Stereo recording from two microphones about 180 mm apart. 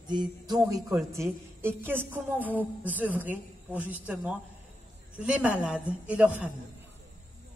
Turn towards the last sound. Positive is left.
turn(degrees=-5)  # may be behind; listen again after turning